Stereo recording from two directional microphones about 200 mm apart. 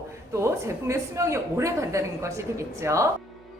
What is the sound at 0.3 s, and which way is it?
A woman's voice, 15° right (ahead or behind).